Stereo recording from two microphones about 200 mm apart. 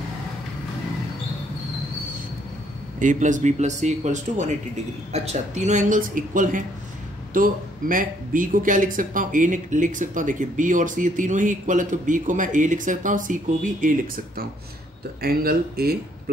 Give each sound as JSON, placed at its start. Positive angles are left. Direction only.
{"t": 3.0, "sound": "a man's voice", "side_deg": -40}